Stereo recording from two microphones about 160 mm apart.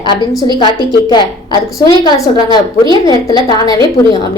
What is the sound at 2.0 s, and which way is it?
A woman's voice, 25° left (ahead or behind).